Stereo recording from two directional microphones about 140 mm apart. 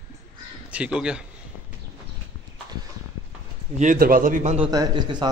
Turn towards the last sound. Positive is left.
turn(degrees=-30)  # may be behind; listen again after turning